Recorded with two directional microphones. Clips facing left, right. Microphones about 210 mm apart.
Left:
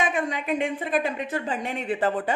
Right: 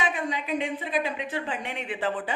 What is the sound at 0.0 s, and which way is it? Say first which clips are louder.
Speech: left 3 dB; 50° left (ahead or behind).